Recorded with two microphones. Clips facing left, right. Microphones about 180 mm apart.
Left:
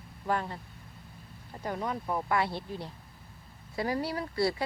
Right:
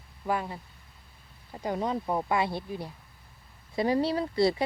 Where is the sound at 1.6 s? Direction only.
20° right (ahead or behind).